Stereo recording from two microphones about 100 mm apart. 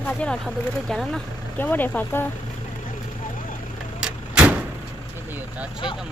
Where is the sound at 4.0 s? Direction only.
10° right (ahead or behind).